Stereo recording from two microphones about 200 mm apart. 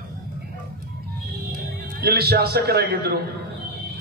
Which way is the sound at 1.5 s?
50° right (ahead or behind).